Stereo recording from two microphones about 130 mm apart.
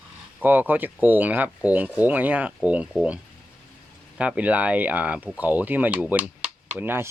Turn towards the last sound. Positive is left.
turn(degrees=-15)  # may be behind; listen again after turning